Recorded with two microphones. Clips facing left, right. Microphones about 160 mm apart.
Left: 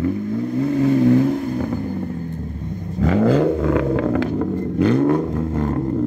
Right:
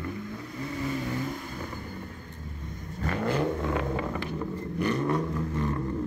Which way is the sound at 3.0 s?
90° left.